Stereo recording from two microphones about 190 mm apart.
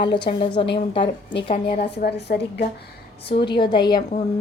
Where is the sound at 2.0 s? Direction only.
55° left (ahead or behind).